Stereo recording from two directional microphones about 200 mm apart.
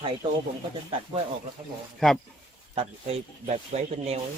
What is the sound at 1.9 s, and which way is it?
Speech, centre (ahead or behind).